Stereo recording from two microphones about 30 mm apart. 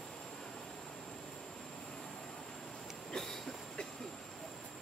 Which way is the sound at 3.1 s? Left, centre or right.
Centre.